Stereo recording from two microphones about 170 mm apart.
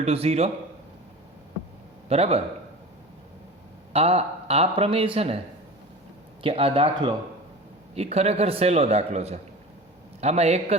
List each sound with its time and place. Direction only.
0.0 s a man's voice: 35° right (ahead or behind)
2.0 s a man's voice: 35° right (ahead or behind)
3.9 s a man's voice: 35° right (ahead or behind)
6.4 s a man's voice: 35° right (ahead or behind)